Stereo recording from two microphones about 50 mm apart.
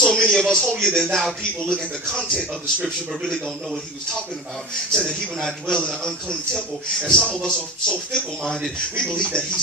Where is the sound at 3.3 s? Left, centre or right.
Centre.